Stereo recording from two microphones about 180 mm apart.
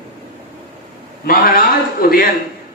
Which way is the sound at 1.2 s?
55° left (ahead or behind).